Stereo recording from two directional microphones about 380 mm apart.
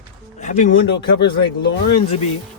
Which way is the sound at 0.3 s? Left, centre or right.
Centre.